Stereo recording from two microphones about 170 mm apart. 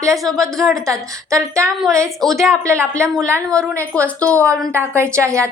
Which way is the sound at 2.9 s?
20° right (ahead or behind).